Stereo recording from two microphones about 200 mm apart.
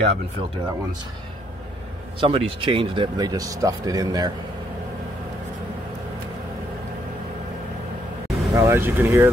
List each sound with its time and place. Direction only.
0.0 s speech: 25° right (ahead or behind)
2.1 s speech: 25° right (ahead or behind)
8.5 s speech: 10° right (ahead or behind)